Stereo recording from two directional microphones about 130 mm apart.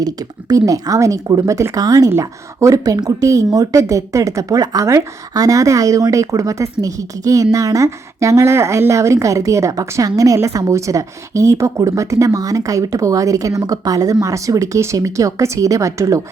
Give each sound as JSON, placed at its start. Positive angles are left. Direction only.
{"t": 0.0, "sound": "a woman's voice", "side_deg": -30}